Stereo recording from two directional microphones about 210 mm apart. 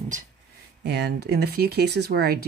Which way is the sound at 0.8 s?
55° right (ahead or behind).